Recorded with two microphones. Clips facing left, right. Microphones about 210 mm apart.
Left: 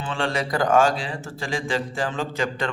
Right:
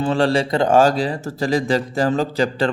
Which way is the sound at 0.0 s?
40° right (ahead or behind).